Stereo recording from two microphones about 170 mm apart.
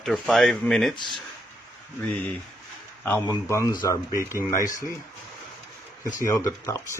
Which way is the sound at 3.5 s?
15° left (ahead or behind).